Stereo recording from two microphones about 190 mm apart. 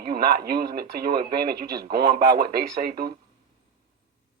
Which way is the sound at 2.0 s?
20° right (ahead or behind).